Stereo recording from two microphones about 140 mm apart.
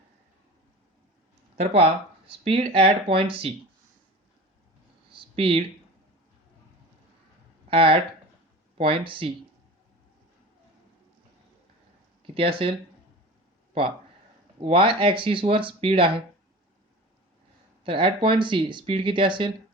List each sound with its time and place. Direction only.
1.5 s speech: 45° right (ahead or behind)
5.1 s a sound: 40° right (ahead or behind)
7.7 s speech: 40° right (ahead or behind)
12.3 s speech: 40° right (ahead or behind)
14.6 s speech: 40° right (ahead or behind)
17.8 s speech: 40° right (ahead or behind)